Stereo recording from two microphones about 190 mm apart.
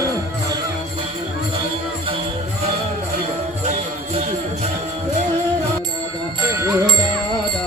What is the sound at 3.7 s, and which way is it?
Jingle bell, 35° right (ahead or behind).